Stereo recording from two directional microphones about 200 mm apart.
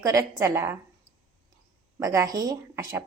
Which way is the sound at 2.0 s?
15° right (ahead or behind).